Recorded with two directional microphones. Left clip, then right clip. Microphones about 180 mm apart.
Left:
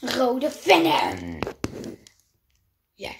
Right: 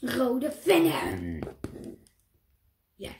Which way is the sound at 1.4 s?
45° left (ahead or behind).